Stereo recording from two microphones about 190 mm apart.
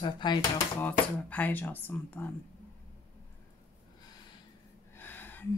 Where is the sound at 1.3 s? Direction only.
10° left (ahead or behind).